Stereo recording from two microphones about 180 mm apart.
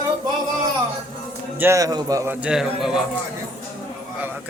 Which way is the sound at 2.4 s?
5° right (ahead or behind).